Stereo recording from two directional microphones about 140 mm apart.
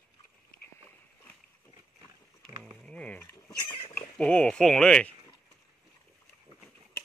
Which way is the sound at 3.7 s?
45° left (ahead or behind).